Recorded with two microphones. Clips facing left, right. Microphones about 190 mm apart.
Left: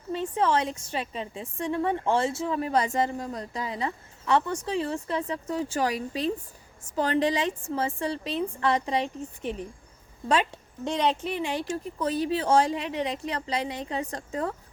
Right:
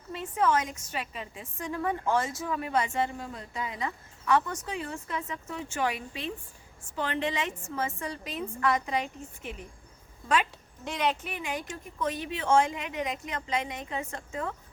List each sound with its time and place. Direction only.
0.1 s a woman's voice: 30° left (ahead or behind)
10.8 s a woman's voice: 30° left (ahead or behind)